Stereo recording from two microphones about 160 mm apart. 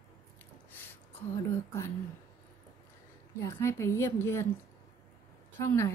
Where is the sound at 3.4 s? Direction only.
15° left (ahead or behind).